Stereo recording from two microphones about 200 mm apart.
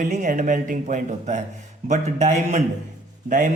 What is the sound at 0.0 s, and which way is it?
Speech, 40° right (ahead or behind).